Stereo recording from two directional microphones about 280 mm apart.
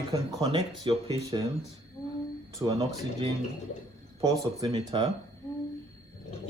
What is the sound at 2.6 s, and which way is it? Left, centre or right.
Speech, centre.